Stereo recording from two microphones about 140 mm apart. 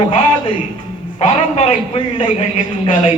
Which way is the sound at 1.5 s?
45° left (ahead or behind).